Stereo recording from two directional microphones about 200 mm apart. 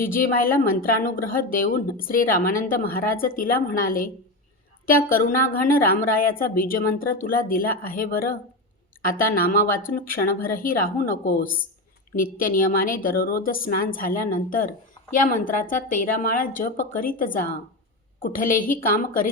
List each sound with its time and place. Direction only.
0.0 s a woman's voice: 45° left (ahead or behind)